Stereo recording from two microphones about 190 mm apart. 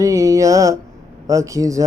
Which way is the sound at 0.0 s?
15° right (ahead or behind).